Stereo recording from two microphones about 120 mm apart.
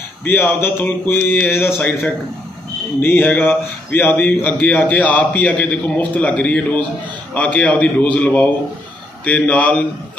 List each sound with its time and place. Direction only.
0.2 s speech: 20° left (ahead or behind)